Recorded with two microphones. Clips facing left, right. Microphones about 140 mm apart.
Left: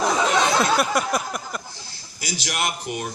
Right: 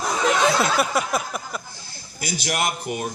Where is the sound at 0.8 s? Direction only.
Centre (ahead or behind).